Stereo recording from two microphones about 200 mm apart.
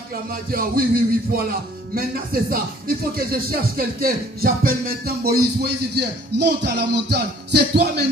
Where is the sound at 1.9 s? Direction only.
45° right (ahead or behind).